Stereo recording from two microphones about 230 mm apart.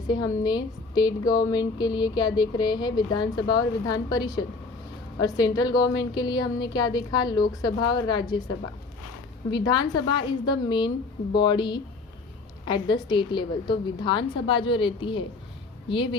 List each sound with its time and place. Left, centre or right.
0.1 s a woman's voice: centre